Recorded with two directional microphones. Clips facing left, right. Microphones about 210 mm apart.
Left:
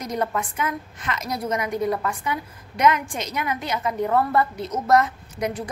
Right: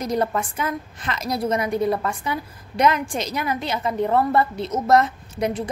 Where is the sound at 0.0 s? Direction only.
30° right (ahead or behind).